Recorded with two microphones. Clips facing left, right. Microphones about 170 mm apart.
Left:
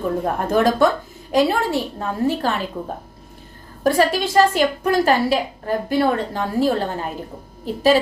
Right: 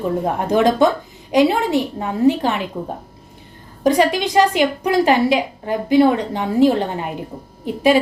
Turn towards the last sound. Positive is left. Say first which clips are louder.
# right 1 dB
turn(degrees=-15)  # may be behind; listen again after turning